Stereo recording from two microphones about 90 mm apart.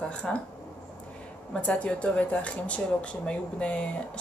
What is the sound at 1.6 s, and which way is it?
Speech, 15° left (ahead or behind).